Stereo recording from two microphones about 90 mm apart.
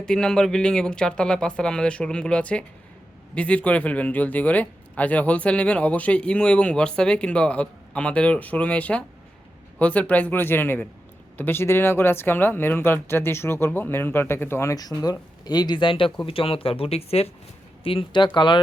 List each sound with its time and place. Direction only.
0.0 s speech: 10° left (ahead or behind); by 14.8 s 30° left (ahead or behind)
14.8 s speech: 45° left (ahead or behind); by 16.1 s 70° left (ahead or behind)
16.2 s speech: 90° left
17.8 s speech: 75° left (ahead or behind)